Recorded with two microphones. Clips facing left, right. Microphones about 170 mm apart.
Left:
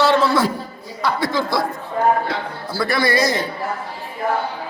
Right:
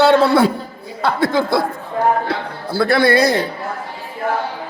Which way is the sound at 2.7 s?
60° right (ahead or behind).